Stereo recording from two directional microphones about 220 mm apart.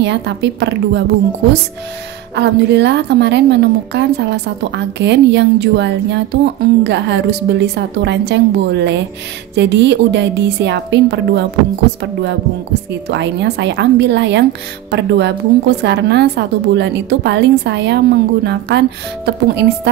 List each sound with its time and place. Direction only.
0.0 s a woman's voice: 50° right (ahead or behind)
2.3 s a woman's voice: 50° right (ahead or behind)